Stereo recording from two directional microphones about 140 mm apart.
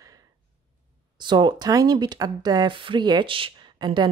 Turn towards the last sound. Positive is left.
turn(degrees=-30)  # may be behind; listen again after turning